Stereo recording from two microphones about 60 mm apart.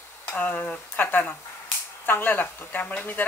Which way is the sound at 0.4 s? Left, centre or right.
Left.